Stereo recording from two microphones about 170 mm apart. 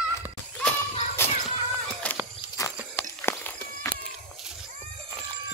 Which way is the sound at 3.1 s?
15° left (ahead or behind).